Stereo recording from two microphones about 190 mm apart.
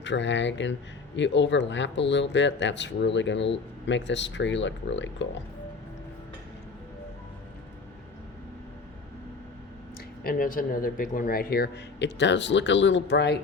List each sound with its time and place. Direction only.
0.0 s speech: 70° left (ahead or behind)
10.2 s speech: 45° left (ahead or behind); by 13.4 s 65° left (ahead or behind)